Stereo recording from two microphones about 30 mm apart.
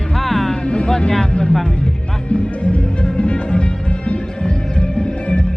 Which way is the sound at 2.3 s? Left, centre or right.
Left.